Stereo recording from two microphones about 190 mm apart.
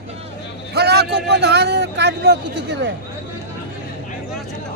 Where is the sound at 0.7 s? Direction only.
60° right (ahead or behind).